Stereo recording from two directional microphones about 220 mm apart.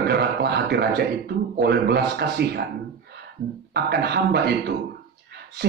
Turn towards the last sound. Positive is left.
turn(degrees=-45)  # may be behind; listen again after turning